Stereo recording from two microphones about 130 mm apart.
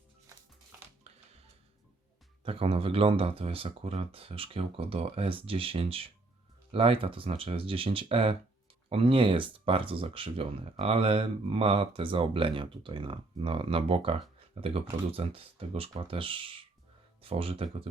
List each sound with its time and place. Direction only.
1.1 s music: 55° right (ahead or behind)
2.4 s speech: 45° right (ahead or behind)